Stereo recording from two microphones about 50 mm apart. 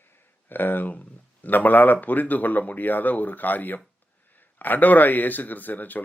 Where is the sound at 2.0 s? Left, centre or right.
Left.